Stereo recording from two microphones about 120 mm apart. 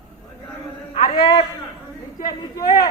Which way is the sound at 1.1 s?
35° left (ahead or behind).